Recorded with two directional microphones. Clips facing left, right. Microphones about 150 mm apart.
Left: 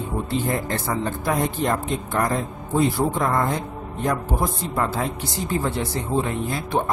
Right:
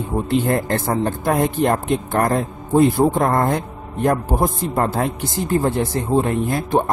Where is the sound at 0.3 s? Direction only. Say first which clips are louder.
Right 7 dB; 55° right (ahead or behind).